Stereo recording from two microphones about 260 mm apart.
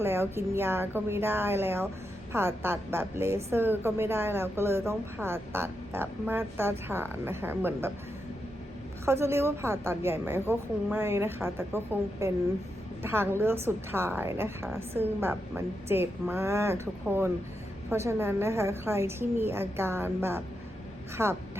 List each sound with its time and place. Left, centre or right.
0.0 s a woman's voice: centre
9.0 s a woman's voice: centre